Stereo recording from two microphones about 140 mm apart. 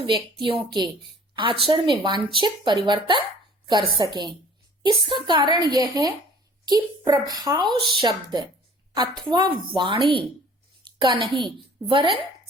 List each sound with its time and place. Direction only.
0.4 s a child's voice: 35° right (ahead or behind)